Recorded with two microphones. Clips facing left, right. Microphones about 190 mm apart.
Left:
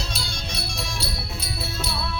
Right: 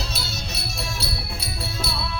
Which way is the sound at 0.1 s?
5° right (ahead or behind).